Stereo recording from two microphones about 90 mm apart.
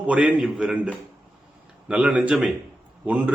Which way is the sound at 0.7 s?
15° right (ahead or behind).